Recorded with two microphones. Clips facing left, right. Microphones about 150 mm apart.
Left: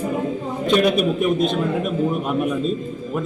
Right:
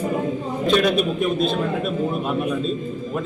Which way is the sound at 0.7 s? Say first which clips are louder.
Left 2 dB; 15° left (ahead or behind).